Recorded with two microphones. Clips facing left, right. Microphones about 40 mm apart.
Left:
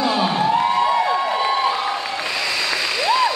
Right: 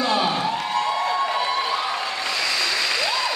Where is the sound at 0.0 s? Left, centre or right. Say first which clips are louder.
Left 3 dB; centre.